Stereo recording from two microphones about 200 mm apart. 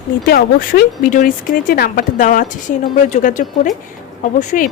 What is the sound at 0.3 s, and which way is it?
A woman's voice, 50° left (ahead or behind).